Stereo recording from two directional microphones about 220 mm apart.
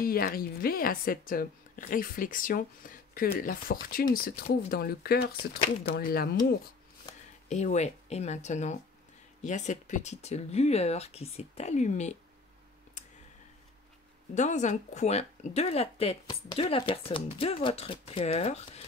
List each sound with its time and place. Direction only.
0.0 s speech: 40° left (ahead or behind)
7.4 s speech: 30° left (ahead or behind)
13.0 s clicking: 35° left (ahead or behind)
14.3 s speech: 35° left (ahead or behind)